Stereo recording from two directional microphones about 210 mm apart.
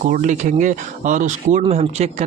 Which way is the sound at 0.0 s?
35° right (ahead or behind).